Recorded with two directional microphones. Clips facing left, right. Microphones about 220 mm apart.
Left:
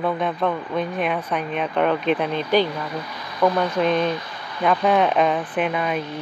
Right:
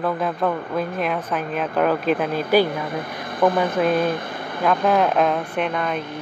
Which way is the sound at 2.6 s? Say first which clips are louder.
Right 2 dB; 50° right (ahead or behind).